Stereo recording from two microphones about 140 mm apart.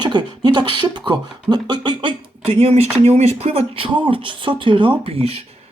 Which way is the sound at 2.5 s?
45° right (ahead or behind).